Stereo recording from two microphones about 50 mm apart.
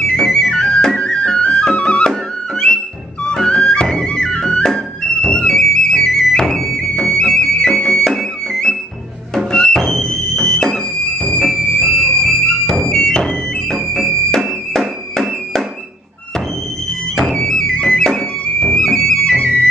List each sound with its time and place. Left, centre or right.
0.0 s music: centre
3.4 s music: centre
13.7 s music: centre
17.1 s music: centre